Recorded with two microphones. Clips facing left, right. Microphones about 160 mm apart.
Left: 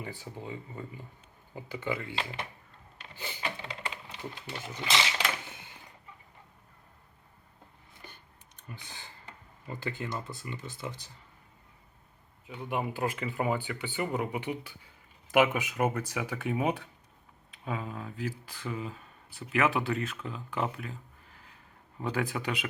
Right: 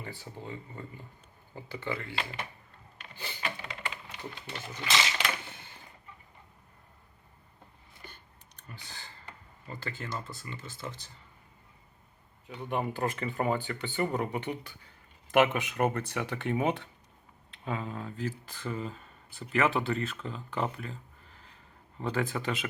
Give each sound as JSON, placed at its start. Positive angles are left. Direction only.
{"t": 0.0, "sound": "speech", "side_deg": 15}
{"t": 3.2, "sound": "a sound", "side_deg": 20}
{"t": 4.4, "sound": "speech", "side_deg": 10}
{"t": 8.6, "sound": "a sound", "side_deg": 15}
{"t": 9.6, "sound": "speech", "side_deg": 15}
{"t": 12.5, "sound": "speech", "side_deg": 10}